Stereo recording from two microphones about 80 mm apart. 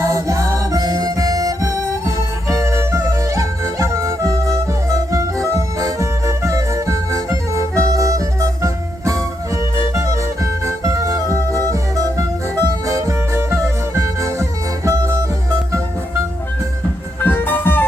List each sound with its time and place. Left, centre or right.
0.0 s music: right
17.2 s music: left